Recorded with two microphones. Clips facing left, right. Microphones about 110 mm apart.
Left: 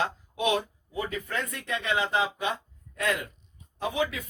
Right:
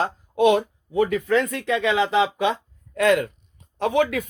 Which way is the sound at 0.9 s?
75° right (ahead or behind).